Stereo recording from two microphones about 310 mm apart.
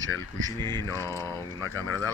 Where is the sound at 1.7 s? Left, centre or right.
Left.